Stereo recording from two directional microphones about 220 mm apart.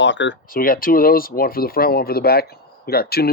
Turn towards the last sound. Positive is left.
turn(degrees=45)  # may be behind; listen again after turning